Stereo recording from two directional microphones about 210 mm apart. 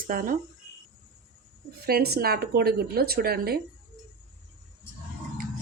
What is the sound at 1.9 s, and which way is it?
Speech, 50° right (ahead or behind).